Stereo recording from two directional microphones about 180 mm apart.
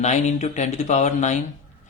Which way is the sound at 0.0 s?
40° left (ahead or behind).